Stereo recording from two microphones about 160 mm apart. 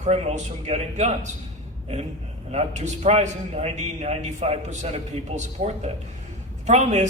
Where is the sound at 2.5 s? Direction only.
45° right (ahead or behind).